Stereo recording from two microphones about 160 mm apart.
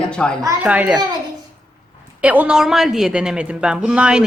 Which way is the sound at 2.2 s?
10° right (ahead or behind).